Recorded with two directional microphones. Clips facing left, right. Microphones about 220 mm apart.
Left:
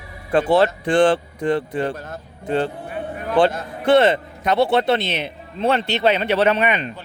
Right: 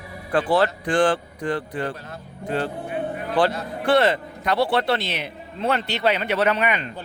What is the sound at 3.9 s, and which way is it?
A man's voice, 25° left (ahead or behind).